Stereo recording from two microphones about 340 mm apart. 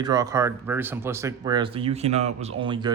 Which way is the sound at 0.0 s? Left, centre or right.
Centre.